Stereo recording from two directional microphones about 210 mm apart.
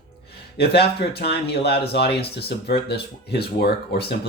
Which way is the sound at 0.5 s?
50° left (ahead or behind).